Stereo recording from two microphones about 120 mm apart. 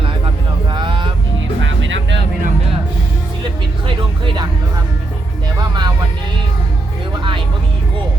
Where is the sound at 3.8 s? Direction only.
45° right (ahead or behind).